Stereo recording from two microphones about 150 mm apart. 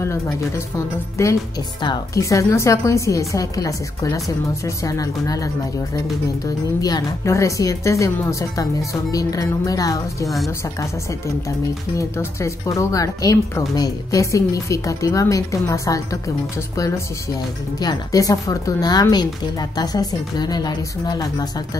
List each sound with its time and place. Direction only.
1.2 s speech: 20° left (ahead or behind)
12.0 s speech: 20° left (ahead or behind)